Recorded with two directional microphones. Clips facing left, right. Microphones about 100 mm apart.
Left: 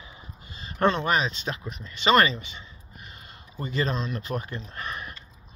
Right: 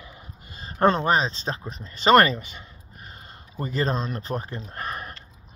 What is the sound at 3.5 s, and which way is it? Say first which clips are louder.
Speech: right 2 dB; 40° right (ahead or behind).